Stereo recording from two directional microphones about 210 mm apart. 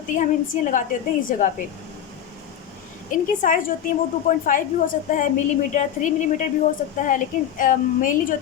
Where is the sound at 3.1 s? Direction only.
40° left (ahead or behind).